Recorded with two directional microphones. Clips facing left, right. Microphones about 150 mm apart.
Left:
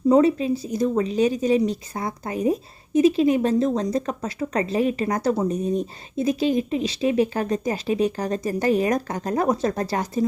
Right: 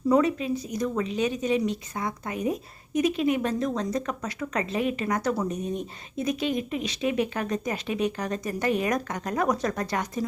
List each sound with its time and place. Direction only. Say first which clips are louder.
0.1 s speech: left 5 dB; 30° left (ahead or behind)